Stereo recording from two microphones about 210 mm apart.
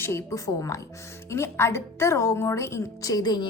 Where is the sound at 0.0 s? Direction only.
15° left (ahead or behind).